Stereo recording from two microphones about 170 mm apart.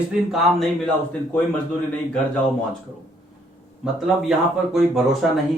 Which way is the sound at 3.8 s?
5° right (ahead or behind).